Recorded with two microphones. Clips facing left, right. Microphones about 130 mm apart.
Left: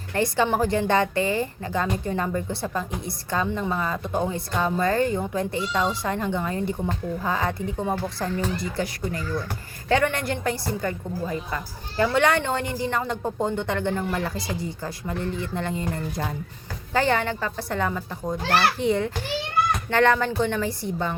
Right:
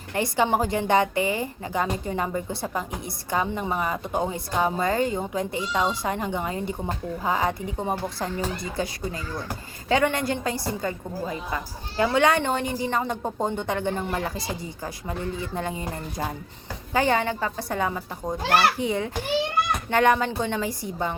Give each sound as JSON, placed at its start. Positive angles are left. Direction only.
{"t": 0.1, "sound": "a woman's voice", "side_deg": -20}